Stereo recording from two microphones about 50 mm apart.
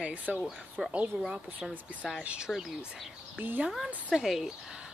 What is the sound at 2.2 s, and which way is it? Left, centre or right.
Speech, centre.